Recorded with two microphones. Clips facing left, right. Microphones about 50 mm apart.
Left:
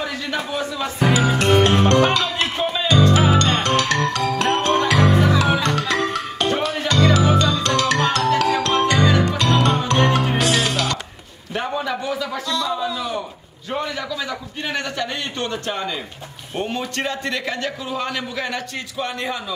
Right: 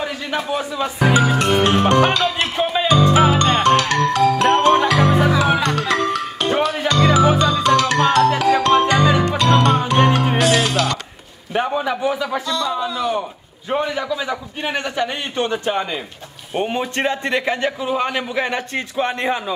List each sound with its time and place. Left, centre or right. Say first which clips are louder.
0.3 s speech: right 4 dB; centre
1.4 s music: even; centre
3.1 s music: right 2 dB; centre
3.4 s music: right 4 dB; centre
11.5 s a man's voice: right 4 dB; centre
12.4 s music: right 1 dB; centre
13.7 s a man's voice: right 5 dB; centre